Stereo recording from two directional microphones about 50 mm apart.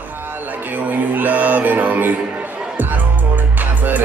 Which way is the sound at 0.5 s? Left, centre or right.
Right.